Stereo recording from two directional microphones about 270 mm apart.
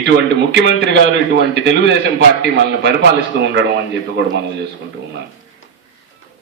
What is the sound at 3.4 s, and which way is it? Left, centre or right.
A man's voice, right.